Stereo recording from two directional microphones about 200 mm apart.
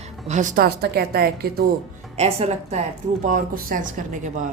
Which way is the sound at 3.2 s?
40° right (ahead or behind).